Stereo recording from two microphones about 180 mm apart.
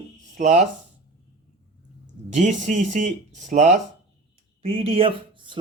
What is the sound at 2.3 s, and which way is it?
Speech, 40° right (ahead or behind).